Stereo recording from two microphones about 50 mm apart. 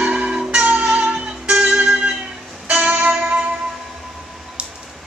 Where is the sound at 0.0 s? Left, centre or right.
Right.